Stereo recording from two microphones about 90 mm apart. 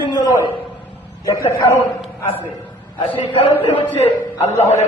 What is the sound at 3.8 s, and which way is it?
Speech, 25° left (ahead or behind).